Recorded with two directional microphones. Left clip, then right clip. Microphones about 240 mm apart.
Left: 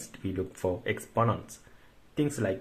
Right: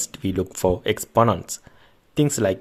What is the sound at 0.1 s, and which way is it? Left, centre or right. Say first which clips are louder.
Speech: right 9 dB; right.